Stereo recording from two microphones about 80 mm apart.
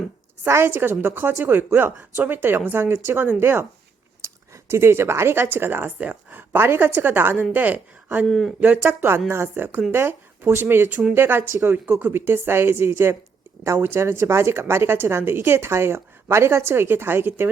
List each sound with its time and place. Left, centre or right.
0.4 s speech: right
4.2 s a sound: right
4.7 s speech: right
8.3 s speech: centre
8.6 s speech: right